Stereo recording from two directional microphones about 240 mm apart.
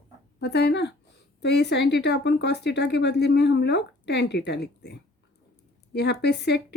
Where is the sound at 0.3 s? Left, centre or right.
Left.